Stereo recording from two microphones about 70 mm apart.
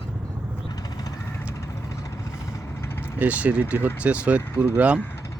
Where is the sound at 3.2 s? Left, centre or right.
Right.